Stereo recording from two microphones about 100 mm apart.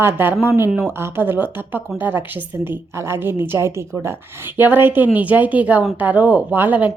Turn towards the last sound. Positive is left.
turn(degrees=-15)  # may be behind; listen again after turning